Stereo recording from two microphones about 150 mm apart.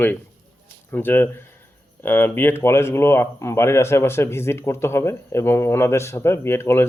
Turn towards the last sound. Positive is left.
turn(degrees=15)  # may be behind; listen again after turning